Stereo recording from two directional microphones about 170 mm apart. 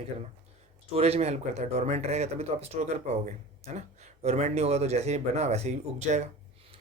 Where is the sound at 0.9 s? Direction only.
35° right (ahead or behind).